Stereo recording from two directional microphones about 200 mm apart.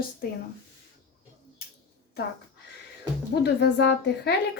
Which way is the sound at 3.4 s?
60° left (ahead or behind).